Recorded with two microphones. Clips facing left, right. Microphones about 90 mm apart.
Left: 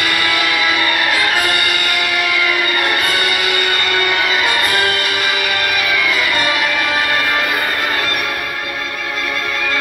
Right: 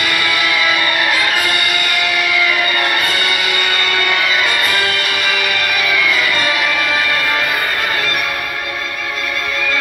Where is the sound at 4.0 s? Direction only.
20° left (ahead or behind).